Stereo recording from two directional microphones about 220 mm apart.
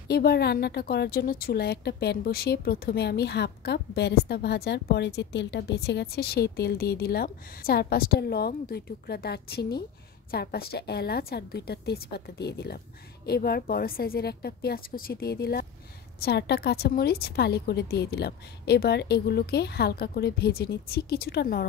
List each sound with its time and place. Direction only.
0.1 s a woman's voice: 45° left (ahead or behind)